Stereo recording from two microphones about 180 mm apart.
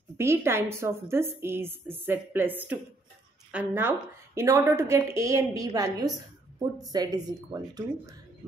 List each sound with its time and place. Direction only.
0.2 s a woman's voice: 15° right (ahead or behind)